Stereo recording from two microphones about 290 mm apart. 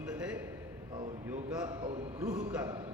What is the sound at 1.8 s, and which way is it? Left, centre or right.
Speech, centre.